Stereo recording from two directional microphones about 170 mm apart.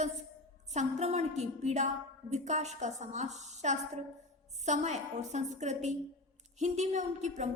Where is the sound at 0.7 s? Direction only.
40° right (ahead or behind).